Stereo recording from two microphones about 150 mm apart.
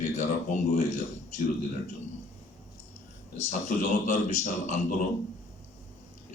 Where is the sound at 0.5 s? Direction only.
50° left (ahead or behind).